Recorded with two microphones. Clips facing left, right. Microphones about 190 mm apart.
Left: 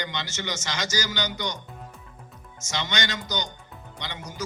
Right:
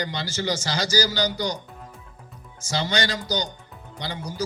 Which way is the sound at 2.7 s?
35° right (ahead or behind).